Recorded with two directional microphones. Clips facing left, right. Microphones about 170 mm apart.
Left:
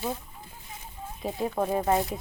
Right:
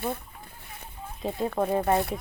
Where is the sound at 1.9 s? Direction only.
60° right (ahead or behind).